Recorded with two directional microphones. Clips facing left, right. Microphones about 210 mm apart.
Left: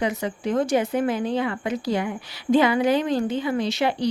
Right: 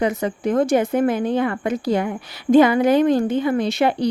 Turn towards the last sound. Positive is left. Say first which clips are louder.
# right 4 dB
turn(degrees=-55)  # may be behind; listen again after turning